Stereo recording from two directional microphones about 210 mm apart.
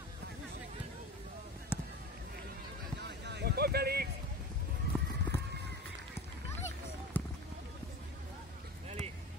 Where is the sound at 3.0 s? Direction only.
55° right (ahead or behind).